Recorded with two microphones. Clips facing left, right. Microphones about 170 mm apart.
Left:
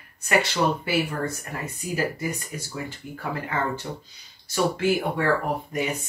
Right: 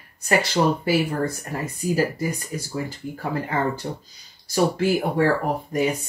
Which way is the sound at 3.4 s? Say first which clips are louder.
Right 3 dB; 35° right (ahead or behind).